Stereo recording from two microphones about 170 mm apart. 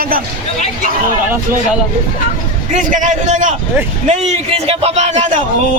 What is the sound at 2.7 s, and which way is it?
A man's voice, 50° right (ahead or behind).